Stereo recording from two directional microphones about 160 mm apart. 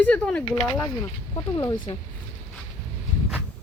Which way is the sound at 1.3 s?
20° left (ahead or behind).